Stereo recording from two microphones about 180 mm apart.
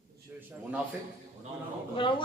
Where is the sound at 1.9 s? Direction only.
30° left (ahead or behind).